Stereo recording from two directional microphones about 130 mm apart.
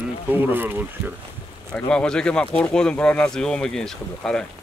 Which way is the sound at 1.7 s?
5° left (ahead or behind).